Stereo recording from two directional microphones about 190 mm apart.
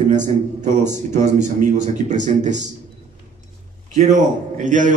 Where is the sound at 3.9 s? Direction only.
40° right (ahead or behind).